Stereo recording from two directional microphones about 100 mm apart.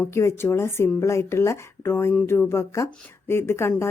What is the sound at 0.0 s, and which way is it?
A woman's voice, 30° left (ahead or behind).